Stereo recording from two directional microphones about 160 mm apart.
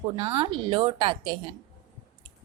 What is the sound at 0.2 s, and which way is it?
A woman's voice, 35° right (ahead or behind).